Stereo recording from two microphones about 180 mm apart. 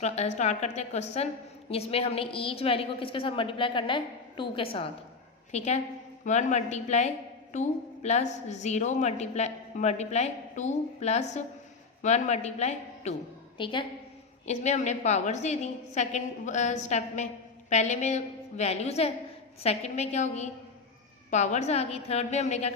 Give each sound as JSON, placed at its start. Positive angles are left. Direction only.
{"t": 0.0, "sound": "a woman's voice", "side_deg": 40}
{"t": 13.6, "sound": "a woman's voice", "side_deg": 25}
{"t": 14.4, "sound": "a woman's voice", "side_deg": 40}